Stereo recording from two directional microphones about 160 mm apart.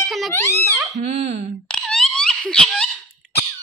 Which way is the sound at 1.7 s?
5° left (ahead or behind).